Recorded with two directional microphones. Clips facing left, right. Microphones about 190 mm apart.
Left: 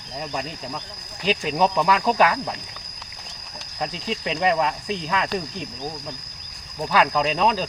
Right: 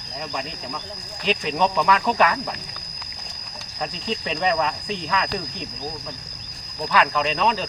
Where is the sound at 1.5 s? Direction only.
Centre (ahead or behind).